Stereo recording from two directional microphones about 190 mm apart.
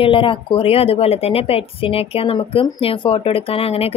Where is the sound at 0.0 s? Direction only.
25° left (ahead or behind).